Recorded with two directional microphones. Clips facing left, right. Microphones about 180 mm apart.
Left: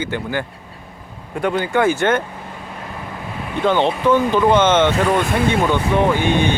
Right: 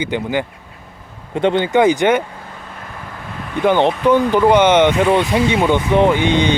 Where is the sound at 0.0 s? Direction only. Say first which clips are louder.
Right 3 dB; 15° right (ahead or behind).